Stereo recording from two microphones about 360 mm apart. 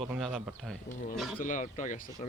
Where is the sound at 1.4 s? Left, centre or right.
Left.